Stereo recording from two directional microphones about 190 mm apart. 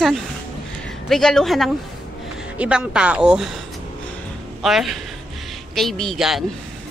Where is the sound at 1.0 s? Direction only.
Centre (ahead or behind).